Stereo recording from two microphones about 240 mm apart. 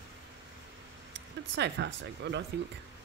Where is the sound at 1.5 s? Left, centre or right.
Right.